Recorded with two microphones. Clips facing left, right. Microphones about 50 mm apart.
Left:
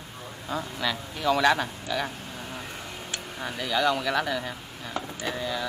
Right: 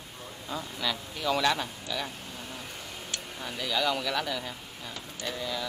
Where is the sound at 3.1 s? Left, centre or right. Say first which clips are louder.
Left 4 dB; centre.